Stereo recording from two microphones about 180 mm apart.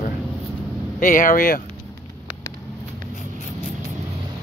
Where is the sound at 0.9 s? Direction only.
45° left (ahead or behind).